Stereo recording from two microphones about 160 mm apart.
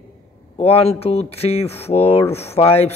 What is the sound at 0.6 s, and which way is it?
A man's voice, 40° left (ahead or behind).